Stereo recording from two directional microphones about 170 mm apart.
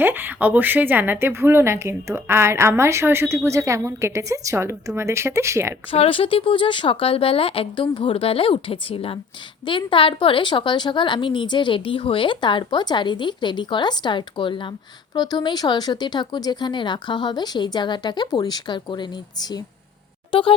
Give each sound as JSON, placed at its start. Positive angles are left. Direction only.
{"t": 0.0, "sound": "speech", "side_deg": -10}
{"t": 5.9, "sound": "a woman's voice", "side_deg": 35}